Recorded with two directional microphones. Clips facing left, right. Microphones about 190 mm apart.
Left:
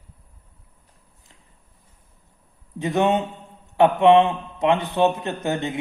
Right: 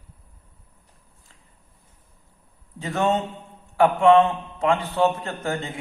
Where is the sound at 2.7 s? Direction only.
15° left (ahead or behind).